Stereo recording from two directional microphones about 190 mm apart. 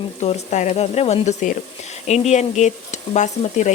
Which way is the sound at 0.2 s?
35° left (ahead or behind).